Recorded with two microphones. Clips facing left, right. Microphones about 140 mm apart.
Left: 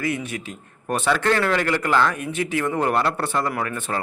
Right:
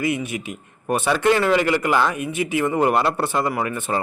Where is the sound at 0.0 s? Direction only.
15° right (ahead or behind).